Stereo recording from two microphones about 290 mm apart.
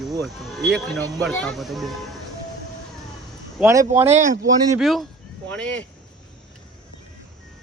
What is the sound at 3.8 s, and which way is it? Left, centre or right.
Speech, right.